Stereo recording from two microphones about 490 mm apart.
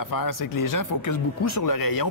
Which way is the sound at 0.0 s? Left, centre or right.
Left.